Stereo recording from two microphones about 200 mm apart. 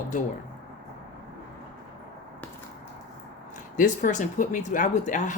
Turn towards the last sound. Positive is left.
turn(degrees=40)  # may be behind; listen again after turning